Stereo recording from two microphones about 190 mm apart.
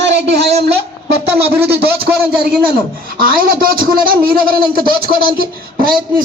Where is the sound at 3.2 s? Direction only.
50° right (ahead or behind).